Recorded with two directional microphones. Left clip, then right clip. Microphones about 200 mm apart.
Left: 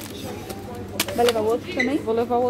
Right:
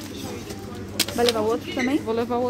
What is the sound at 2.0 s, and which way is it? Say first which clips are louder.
Speech: left 3 dB; centre (ahead or behind).